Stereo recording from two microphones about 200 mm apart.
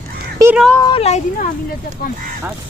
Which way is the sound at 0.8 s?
30° left (ahead or behind).